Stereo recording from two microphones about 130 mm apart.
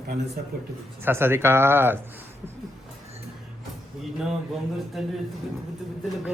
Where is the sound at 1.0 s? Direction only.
15° right (ahead or behind).